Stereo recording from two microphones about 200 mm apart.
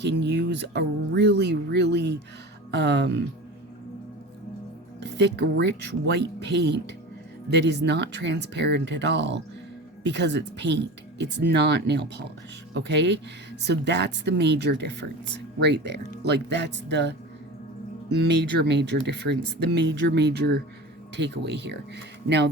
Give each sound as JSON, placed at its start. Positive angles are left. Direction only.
{"t": 0.0, "sound": "speech", "side_deg": -60}
{"t": 4.9, "sound": "speech", "side_deg": -60}
{"t": 18.7, "sound": "speech", "side_deg": -60}